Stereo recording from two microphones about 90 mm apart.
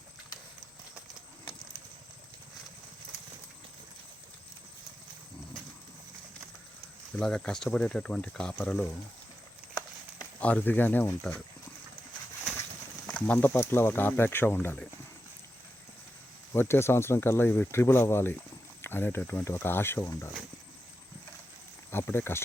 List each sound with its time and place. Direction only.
7.2 s speech: 10° left (ahead or behind)
10.4 s speech: 15° left (ahead or behind)
13.1 s speech: 10° left (ahead or behind)
16.5 s speech: 25° left (ahead or behind)
21.9 s speech: 25° left (ahead or behind)